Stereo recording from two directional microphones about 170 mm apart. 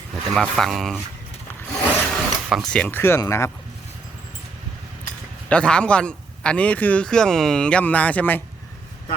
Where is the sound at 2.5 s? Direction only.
Centre (ahead or behind).